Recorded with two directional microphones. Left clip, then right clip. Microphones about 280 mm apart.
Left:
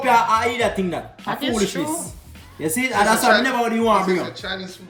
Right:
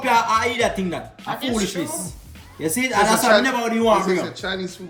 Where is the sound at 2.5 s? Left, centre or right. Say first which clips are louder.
Even; centre.